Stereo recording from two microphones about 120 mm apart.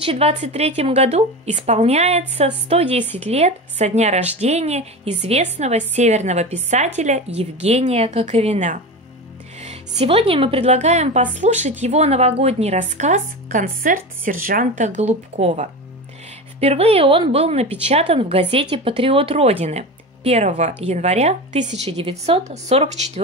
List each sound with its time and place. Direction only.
0.0 s speech: 50° right (ahead or behind)
0.3 s a woman's voice: 70° right (ahead or behind)
9.6 s a woman's voice: 65° right (ahead or behind)
16.5 s speech: 55° right (ahead or behind); by 20.7 s 80° right
20.8 s a woman's voice: 65° right (ahead or behind)